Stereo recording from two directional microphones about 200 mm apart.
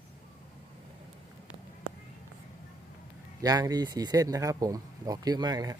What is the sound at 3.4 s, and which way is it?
Speech, 20° right (ahead or behind).